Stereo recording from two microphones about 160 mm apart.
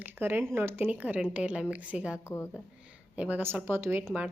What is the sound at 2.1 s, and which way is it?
Speech, 15° left (ahead or behind).